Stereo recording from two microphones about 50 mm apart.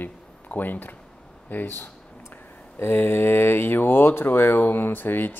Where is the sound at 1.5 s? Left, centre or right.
Left.